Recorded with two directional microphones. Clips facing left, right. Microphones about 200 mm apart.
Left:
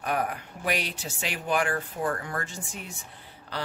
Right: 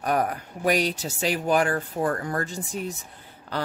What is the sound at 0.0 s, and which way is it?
Speech, 40° right (ahead or behind).